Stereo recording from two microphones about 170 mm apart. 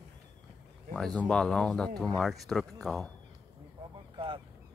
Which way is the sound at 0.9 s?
5° left (ahead or behind).